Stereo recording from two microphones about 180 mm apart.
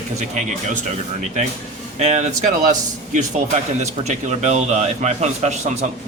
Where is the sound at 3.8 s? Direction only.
40° right (ahead or behind).